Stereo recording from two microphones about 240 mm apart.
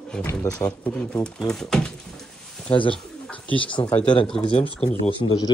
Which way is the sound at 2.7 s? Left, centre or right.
Left.